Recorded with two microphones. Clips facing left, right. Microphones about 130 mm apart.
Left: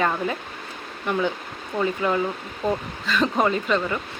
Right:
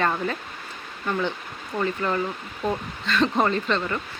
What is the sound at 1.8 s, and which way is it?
Speech, 10° left (ahead or behind).